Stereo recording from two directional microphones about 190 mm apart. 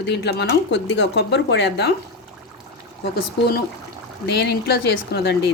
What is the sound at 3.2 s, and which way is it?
A woman's voice, 55° left (ahead or behind).